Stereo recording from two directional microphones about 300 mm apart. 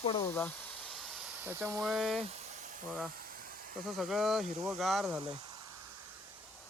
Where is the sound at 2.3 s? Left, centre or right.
Right.